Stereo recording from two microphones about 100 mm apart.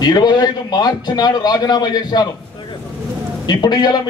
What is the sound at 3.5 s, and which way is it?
Speech, 45° left (ahead or behind).